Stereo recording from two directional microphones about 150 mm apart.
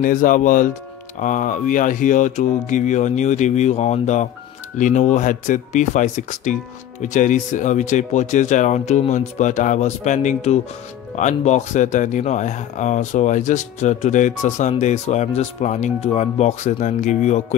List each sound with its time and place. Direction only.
0.0 s speech: 65° left (ahead or behind)